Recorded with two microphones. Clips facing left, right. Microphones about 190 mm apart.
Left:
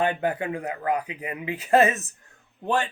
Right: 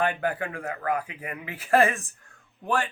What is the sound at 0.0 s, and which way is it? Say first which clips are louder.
Speech: left 2 dB; 20° left (ahead or behind).